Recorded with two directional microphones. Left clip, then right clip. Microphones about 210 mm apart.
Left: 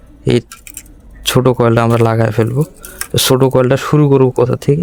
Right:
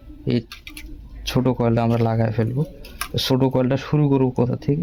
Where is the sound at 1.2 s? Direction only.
65° left (ahead or behind).